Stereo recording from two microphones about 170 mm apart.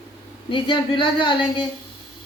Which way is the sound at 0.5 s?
30° left (ahead or behind).